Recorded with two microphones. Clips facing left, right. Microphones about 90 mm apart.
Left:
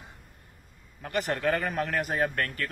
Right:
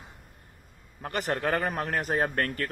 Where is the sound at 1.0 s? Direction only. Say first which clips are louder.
Even; 35° right (ahead or behind).